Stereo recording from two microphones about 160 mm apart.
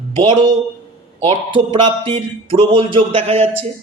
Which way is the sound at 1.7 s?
35° right (ahead or behind).